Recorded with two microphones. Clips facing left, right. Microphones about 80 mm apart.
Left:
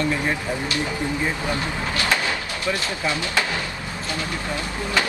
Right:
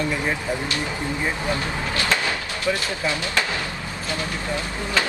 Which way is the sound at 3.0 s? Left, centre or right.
Left.